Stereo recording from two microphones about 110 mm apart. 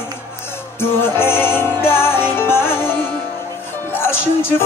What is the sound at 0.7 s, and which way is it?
Music, 20° left (ahead or behind).